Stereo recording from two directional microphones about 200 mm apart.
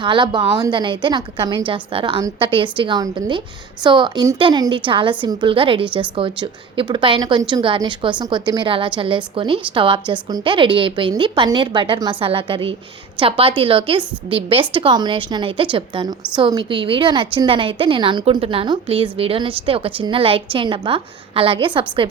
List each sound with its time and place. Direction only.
0.0 s a woman's voice: 25° right (ahead or behind)